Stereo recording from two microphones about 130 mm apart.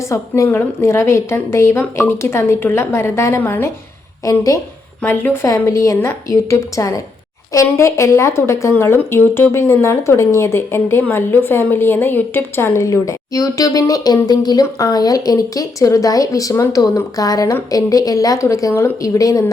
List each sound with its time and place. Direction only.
0.1 s speech: 20° left (ahead or behind)